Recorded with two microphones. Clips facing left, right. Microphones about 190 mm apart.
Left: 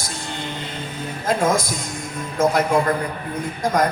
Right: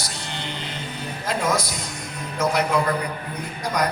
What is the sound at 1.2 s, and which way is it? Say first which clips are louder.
A man's voice: left 4 dB; 50° left (ahead or behind).